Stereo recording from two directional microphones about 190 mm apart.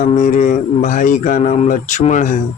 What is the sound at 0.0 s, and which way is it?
Speech, 40° left (ahead or behind).